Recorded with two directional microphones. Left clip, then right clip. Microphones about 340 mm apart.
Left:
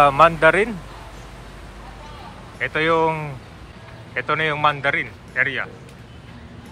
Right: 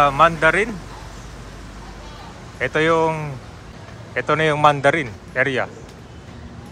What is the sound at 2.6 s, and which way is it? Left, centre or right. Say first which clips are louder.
A man's voice: right 1 dB; centre.